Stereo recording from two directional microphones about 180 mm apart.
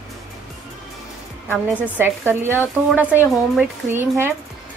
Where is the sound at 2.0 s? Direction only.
10° right (ahead or behind).